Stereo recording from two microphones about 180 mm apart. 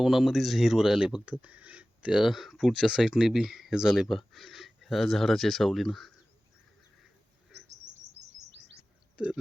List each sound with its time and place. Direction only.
0.0 s speech: centre (ahead or behind)
7.5 s bird: 75° right (ahead or behind)
9.1 s speech: 5° right (ahead or behind)